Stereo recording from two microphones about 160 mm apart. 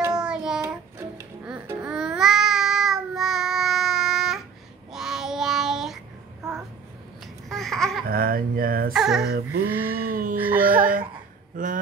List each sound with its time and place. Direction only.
0.2 s child singing: 5° right (ahead or behind)
0.9 s music: 10° right (ahead or behind)
4.9 s child singing: 5° right (ahead or behind)
7.4 s babbling: centre (ahead or behind)
8.1 s fowl: 65° right (ahead or behind)
8.9 s speech: 5° right (ahead or behind)
9.7 s a sound: 10° right (ahead or behind)
9.9 s a sound: 65° right (ahead or behind)
10.3 s music: 10° right (ahead or behind)
10.8 s a sound: 60° right (ahead or behind)